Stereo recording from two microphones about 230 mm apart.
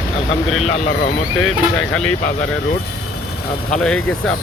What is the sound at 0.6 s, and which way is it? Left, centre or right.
Speech, left.